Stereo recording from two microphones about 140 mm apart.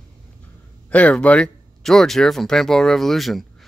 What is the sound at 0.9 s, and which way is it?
Speech, 10° left (ahead or behind).